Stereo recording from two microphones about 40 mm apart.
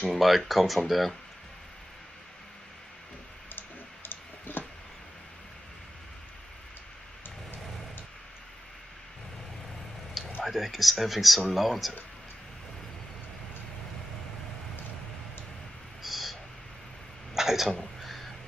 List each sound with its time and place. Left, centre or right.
0.0 s speech: centre
3.5 s clicking: left
10.4 s speech: centre
16.0 s owl: centre
17.3 s a sound: centre
17.6 s a sound: centre